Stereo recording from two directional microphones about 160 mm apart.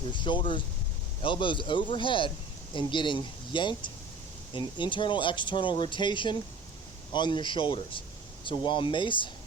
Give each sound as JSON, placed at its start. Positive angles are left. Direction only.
{"t": 0.1, "sound": "speech", "side_deg": 30}